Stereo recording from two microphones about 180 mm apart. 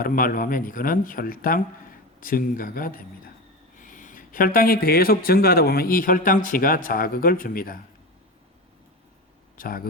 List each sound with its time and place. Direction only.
0.0 s speech: 50° left (ahead or behind)
9.6 s speech: 50° left (ahead or behind)